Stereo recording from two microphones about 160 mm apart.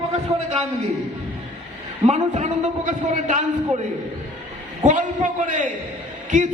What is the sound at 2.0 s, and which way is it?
A man's voice, 45° right (ahead or behind).